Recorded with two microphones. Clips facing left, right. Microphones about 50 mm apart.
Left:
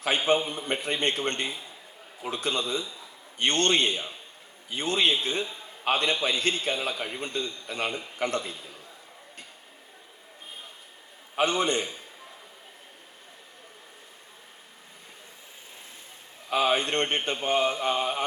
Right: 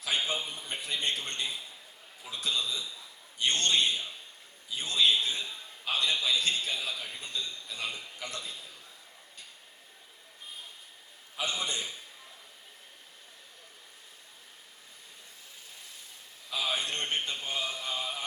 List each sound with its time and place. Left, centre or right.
0.3 s speech: left
6.9 s speech: left
11.3 s speech: left
16.5 s speech: left